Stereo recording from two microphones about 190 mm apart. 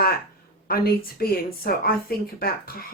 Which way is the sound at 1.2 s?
50° left (ahead or behind).